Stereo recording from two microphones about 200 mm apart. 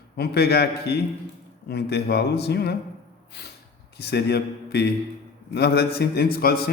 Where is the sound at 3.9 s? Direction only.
55° left (ahead or behind).